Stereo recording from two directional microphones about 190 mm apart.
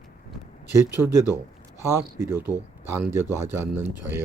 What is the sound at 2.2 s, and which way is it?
Speech, 10° right (ahead or behind).